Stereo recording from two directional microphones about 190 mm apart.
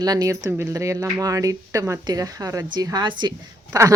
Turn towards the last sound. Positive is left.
turn(degrees=-15)  # may be behind; listen again after turning